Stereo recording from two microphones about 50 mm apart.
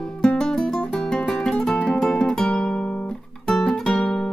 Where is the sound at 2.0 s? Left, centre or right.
Centre.